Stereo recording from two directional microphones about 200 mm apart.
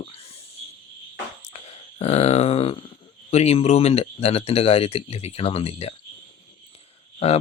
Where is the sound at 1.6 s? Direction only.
30° left (ahead or behind).